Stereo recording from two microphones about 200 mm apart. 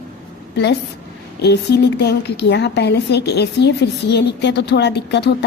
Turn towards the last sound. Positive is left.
turn(degrees=60)  # may be behind; listen again after turning